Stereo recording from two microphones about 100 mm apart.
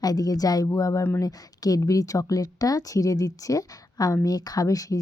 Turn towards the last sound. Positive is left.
turn(degrees=35)  # may be behind; listen again after turning